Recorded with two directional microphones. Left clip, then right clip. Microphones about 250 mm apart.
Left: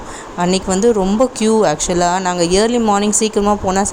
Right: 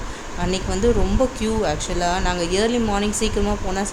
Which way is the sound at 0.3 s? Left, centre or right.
Left.